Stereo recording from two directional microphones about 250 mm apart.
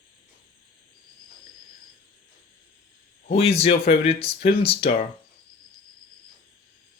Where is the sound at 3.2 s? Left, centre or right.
Left.